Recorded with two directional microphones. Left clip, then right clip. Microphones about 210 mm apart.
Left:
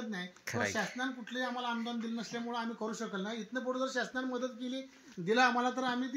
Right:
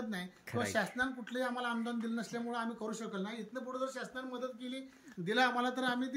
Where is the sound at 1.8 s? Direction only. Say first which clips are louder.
Even; 15° right (ahead or behind).